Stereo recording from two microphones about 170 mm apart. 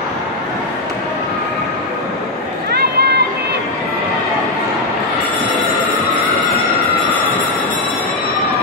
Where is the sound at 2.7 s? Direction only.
70° right (ahead or behind).